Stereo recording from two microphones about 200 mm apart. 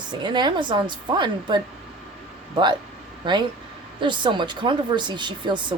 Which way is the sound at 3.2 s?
20° right (ahead or behind).